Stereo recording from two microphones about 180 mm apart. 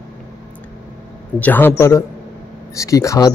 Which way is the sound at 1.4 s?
10° left (ahead or behind).